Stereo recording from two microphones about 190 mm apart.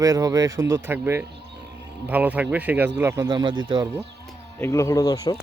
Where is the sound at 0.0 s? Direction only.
20° right (ahead or behind).